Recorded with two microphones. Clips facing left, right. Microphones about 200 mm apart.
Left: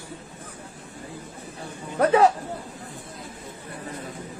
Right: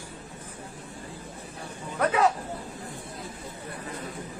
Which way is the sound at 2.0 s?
35° left (ahead or behind).